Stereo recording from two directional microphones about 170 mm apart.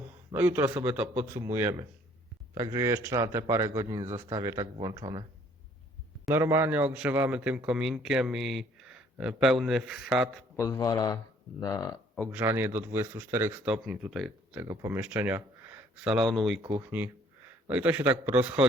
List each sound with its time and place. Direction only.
0.3 s speech: 10° right (ahead or behind)
6.2 s a man's voice: 15° right (ahead or behind)
10.6 s speech: 20° left (ahead or behind)
12.2 s speech: 10° right (ahead or behind)